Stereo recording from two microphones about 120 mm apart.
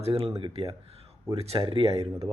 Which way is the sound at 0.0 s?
55° right (ahead or behind).